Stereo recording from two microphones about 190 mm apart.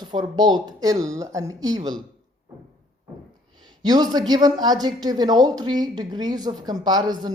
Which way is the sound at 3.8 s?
20° right (ahead or behind).